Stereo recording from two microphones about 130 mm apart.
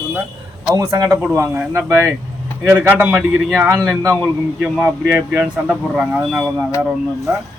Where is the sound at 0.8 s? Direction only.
30° right (ahead or behind).